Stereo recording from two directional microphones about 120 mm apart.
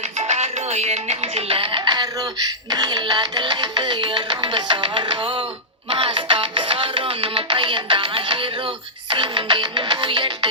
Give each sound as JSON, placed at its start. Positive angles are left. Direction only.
{"t": 0.2, "sound": "music", "side_deg": -65}